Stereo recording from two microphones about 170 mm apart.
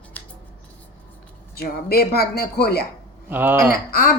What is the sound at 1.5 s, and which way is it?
Speech, 65° left (ahead or behind).